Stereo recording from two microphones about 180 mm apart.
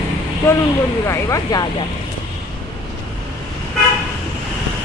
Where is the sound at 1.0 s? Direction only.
15° left (ahead or behind).